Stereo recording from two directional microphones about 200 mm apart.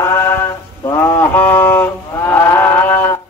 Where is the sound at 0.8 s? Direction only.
10° left (ahead or behind).